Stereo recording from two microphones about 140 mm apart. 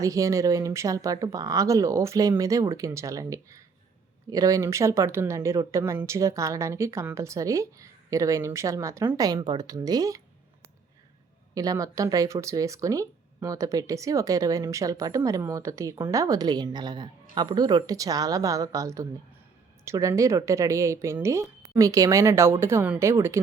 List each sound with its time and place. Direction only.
0.0 s speech: 25° right (ahead or behind)
11.5 s speech: 25° right (ahead or behind)